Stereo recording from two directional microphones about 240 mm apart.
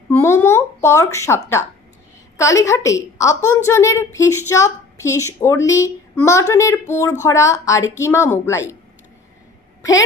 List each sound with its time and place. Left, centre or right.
0.1 s a woman's voice: centre
2.4 s a woman's voice: centre